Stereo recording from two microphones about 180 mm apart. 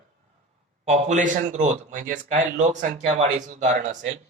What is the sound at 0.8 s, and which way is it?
A man's voice, 40° right (ahead or behind).